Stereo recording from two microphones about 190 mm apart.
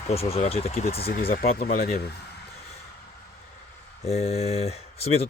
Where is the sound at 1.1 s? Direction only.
50° left (ahead or behind).